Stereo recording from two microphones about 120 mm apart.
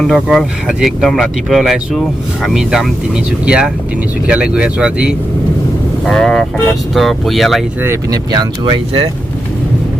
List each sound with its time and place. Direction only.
0.0 s speech: 5° left (ahead or behind)
6.1 s speech: 5° left (ahead or behind)
7.9 s speech: 30° right (ahead or behind)